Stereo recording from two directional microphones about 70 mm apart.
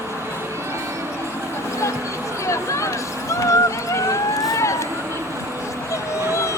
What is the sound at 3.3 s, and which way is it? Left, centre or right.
Run, left.